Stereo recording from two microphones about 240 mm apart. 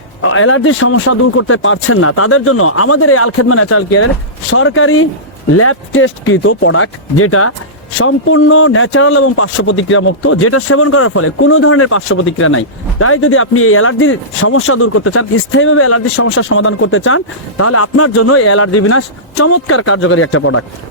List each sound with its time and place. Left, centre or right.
0.2 s speech: left
4.5 s speech: left